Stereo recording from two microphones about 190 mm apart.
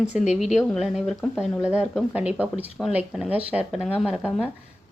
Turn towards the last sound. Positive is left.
turn(degrees=-5)  # may be behind; listen again after turning